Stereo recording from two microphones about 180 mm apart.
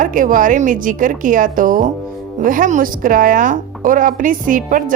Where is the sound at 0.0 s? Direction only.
50° right (ahead or behind).